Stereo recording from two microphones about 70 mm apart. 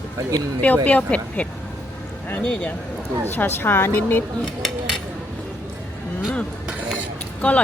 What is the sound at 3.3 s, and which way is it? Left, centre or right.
Speech, left.